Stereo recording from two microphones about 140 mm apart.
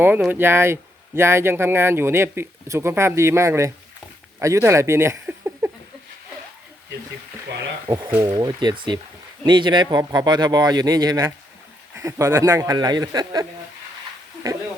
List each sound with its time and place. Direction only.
0.3 s speech: 15° right (ahead or behind)
7.9 s a man's voice: 30° right (ahead or behind)